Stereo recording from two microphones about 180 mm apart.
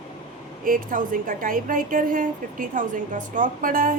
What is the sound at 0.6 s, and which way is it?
A woman's voice, 50° right (ahead or behind).